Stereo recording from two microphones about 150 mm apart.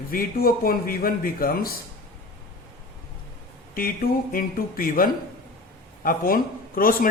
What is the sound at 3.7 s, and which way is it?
A man's voice, 70° left (ahead or behind).